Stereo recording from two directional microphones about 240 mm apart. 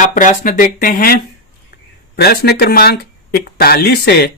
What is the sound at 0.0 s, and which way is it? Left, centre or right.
Speech, left.